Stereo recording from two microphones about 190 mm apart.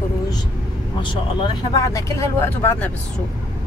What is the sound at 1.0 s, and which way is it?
Speech, 25° left (ahead or behind).